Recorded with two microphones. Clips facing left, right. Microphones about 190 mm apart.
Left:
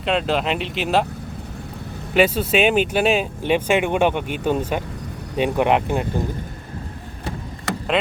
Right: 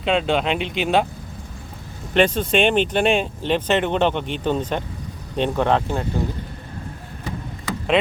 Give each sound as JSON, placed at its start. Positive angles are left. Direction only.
{"t": 0.0, "sound": "speech", "side_deg": 0}
{"t": 2.1, "sound": "speech", "side_deg": 5}
{"t": 7.7, "sound": "vehicle", "side_deg": 75}